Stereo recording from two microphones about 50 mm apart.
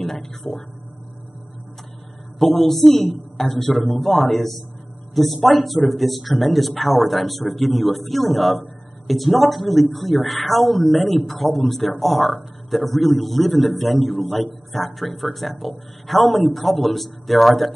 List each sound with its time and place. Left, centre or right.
0.0 s speech: centre
2.3 s a man's voice: centre